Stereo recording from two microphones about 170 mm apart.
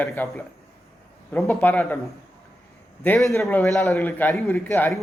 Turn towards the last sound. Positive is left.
turn(degrees=10)  # may be behind; listen again after turning